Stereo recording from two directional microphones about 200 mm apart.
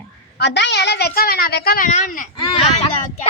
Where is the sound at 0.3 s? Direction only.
60° left (ahead or behind); by 2.3 s 40° left (ahead or behind).